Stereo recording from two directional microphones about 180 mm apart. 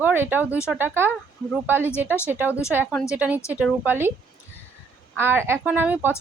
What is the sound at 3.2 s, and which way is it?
Speech, 10° right (ahead or behind).